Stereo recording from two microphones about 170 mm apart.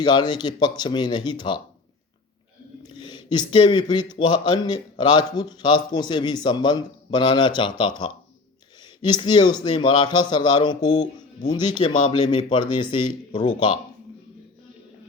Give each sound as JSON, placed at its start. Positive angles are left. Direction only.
{"t": 0.0, "sound": "speech", "side_deg": 25}
{"t": 2.9, "sound": "speech", "side_deg": 25}